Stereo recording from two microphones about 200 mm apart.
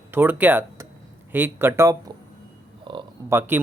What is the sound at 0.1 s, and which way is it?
Speech, 10° right (ahead or behind).